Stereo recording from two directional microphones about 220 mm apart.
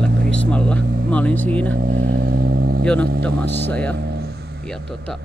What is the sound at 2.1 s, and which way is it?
Vehicle, 45° right (ahead or behind).